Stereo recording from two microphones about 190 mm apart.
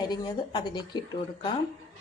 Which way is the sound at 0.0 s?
20° left (ahead or behind).